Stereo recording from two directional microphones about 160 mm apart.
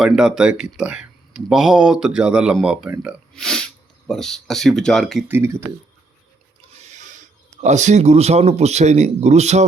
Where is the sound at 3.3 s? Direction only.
5° left (ahead or behind).